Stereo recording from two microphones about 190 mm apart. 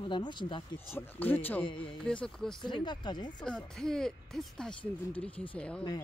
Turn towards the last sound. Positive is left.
turn(degrees=5)  # may be behind; listen again after turning